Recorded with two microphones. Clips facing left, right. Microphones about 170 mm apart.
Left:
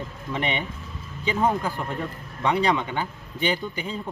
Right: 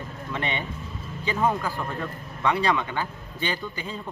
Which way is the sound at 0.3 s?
20° left (ahead or behind).